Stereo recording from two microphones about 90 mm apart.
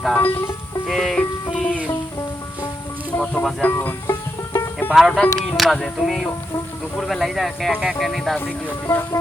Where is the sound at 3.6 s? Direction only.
20° left (ahead or behind).